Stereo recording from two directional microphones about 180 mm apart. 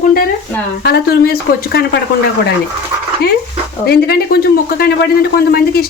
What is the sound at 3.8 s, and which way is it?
Speech, 60° left (ahead or behind).